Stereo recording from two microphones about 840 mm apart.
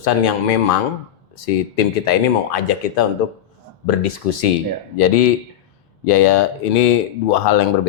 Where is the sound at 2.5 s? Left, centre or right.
Left.